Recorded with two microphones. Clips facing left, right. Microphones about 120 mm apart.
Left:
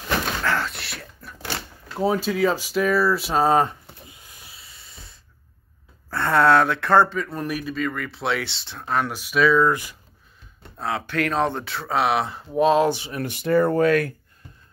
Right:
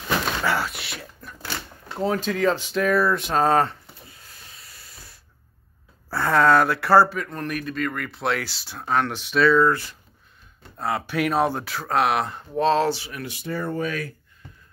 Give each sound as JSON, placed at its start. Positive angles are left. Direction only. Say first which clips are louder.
{"t": 0.4, "sound": "a sound", "louder": "even", "side_deg": -10}
{"t": 2.0, "sound": "speech", "louder": "left 2 dB", "side_deg": 10}
{"t": 4.6, "sound": "hiss", "louder": "even", "side_deg": 0}
{"t": 6.0, "sound": "speech", "louder": "left 1 dB", "side_deg": -5}
{"t": 7.2, "sound": "speech", "louder": "left 1 dB", "side_deg": 10}
{"t": 9.0, "sound": "speech", "louder": "left 1 dB", "side_deg": 10}
{"t": 10.8, "sound": "speech", "louder": "right 1 dB", "side_deg": -5}
{"t": 12.5, "sound": "speech", "louder": "left 2 dB", "side_deg": 15}
{"t": 13.3, "sound": "speech", "louder": "left 10 dB", "side_deg": 70}